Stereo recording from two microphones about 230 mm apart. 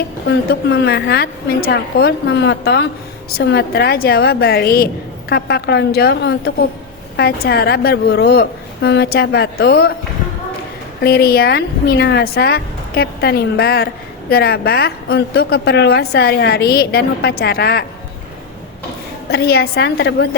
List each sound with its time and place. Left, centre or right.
0.3 s a woman's voice: left
11.0 s a woman's voice: left
19.3 s a woman's voice: left